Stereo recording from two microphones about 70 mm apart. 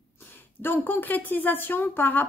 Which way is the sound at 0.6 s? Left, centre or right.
Left.